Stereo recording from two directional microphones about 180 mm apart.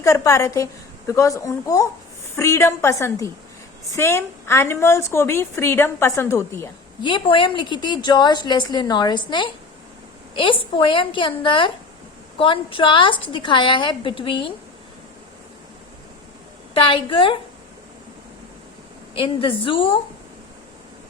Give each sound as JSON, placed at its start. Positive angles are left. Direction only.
{"t": 0.0, "sound": "a woman's voice", "side_deg": 15}
{"t": 7.0, "sound": "a woman's voice", "side_deg": 30}
{"t": 16.7, "sound": "a woman's voice", "side_deg": 30}
{"t": 19.1, "sound": "a woman's voice", "side_deg": 30}